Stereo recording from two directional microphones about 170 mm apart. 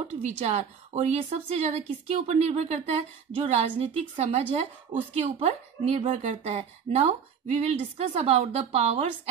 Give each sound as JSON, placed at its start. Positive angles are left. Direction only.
{"t": 0.1, "sound": "a woman's voice", "side_deg": -40}